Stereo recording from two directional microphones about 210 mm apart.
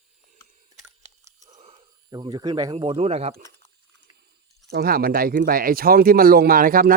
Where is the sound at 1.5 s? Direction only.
30° right (ahead or behind).